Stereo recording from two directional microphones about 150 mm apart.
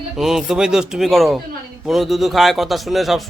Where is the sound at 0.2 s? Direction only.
Centre (ahead or behind).